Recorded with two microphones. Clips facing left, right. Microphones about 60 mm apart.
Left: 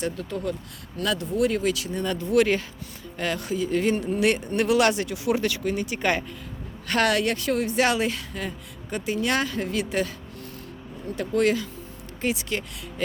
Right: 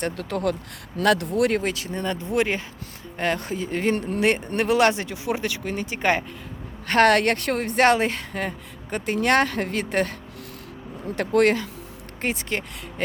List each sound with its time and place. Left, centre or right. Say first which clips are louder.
0.0 s speech: right 3 dB; right
1.0 s speech: right 4 dB; right
1.6 s speech: left 1 dB; right
3.2 s speech: right 1 dB; right
6.8 s speech: right 5 dB; right
11.1 s speech: right 3 dB; right
12.2 s speech: even; right